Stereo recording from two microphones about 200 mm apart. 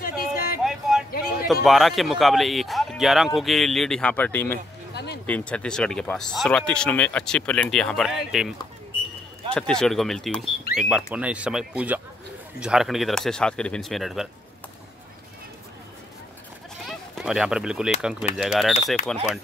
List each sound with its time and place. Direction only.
0.0 s music: 50° left (ahead or behind)
0.7 s music: centre (ahead or behind)
1.1 s a sound: 50° left (ahead or behind)
1.5 s speech: centre (ahead or behind)
4.9 s music: 55° left (ahead or behind)
5.2 s speech: 5° left (ahead or behind)
17.1 s speech: centre (ahead or behind)